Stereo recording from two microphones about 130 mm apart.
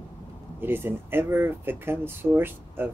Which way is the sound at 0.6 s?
15° right (ahead or behind).